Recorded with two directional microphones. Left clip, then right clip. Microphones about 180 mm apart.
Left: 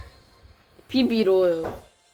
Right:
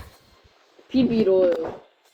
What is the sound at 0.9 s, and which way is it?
Speech, 60° left (ahead or behind).